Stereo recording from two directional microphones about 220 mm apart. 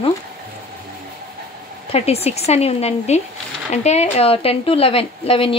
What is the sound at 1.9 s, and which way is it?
A woman's voice, 30° left (ahead or behind).